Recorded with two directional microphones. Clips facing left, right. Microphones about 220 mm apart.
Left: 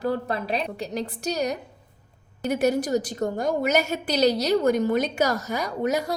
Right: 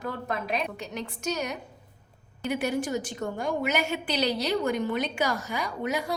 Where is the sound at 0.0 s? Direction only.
35° left (ahead or behind).